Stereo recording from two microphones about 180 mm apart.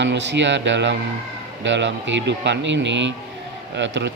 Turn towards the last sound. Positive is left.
turn(degrees=-80)